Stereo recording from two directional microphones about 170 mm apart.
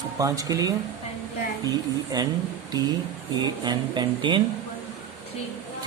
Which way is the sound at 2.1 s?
25° right (ahead or behind).